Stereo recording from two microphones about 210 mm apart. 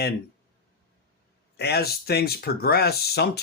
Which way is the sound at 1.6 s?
50° left (ahead or behind).